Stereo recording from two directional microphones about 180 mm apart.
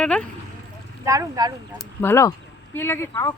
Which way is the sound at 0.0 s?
5° left (ahead or behind).